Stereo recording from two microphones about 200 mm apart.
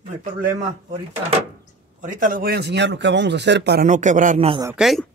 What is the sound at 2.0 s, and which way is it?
Speech, 40° right (ahead or behind).